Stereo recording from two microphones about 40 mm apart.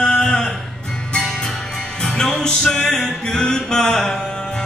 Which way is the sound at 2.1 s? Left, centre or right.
Centre.